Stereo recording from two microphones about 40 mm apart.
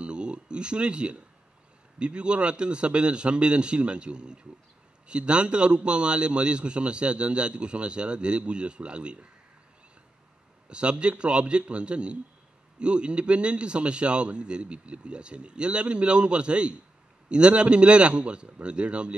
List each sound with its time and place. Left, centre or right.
0.0 s a sound: right
2.0 s a man's voice: right
10.7 s a man's voice: right